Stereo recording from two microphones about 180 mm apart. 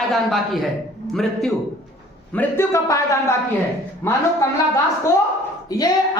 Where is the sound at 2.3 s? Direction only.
15° left (ahead or behind).